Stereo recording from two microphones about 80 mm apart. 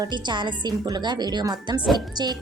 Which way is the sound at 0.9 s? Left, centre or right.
Right.